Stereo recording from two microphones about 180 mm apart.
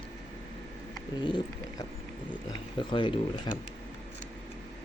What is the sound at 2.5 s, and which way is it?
Speech, 25° left (ahead or behind).